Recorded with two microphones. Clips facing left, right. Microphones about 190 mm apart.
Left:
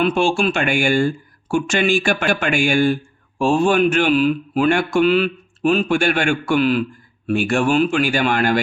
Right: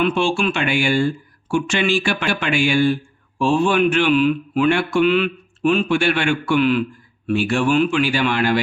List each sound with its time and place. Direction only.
0.0 s speech: 45° left (ahead or behind)